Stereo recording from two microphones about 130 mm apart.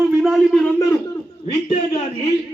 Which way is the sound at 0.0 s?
Centre (ahead or behind).